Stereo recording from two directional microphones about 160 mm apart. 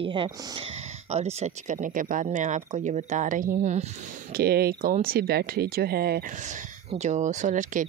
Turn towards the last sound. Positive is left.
turn(degrees=-55)  # may be behind; listen again after turning